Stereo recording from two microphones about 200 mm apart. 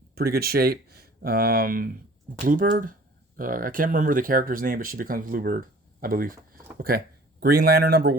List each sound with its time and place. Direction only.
0.2 s speech: 50° right (ahead or behind)